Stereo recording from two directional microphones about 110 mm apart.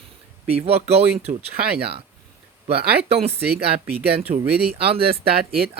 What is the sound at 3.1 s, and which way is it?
Speech, 65° right (ahead or behind).